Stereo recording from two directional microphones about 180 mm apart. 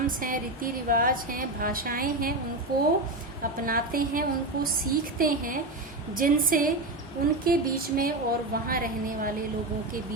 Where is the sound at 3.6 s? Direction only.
50° right (ahead or behind).